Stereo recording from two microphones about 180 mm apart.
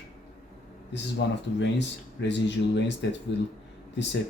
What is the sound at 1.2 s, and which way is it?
Speech, 70° left (ahead or behind).